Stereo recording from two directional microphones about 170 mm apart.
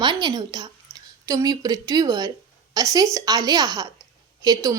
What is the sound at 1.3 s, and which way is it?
A woman's voice, 20° right (ahead or behind).